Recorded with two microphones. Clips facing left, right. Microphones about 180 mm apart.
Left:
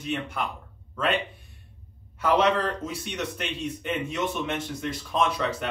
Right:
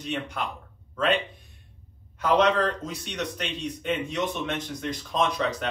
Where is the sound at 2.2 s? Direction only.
5° left (ahead or behind).